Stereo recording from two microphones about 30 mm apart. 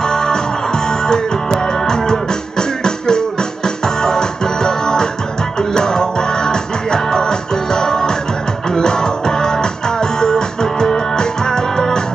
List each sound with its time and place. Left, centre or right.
0.0 s music: left